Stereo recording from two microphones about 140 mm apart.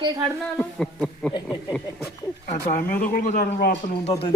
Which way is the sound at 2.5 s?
70° left (ahead or behind).